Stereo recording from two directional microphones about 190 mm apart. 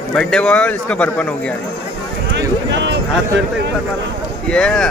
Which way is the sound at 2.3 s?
65° right (ahead or behind).